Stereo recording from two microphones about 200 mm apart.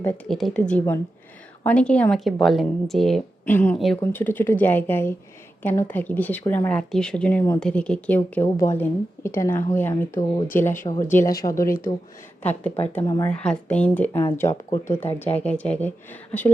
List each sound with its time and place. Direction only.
0.0 s speech: 5° left (ahead or behind)
13.4 s speech: 5° left (ahead or behind)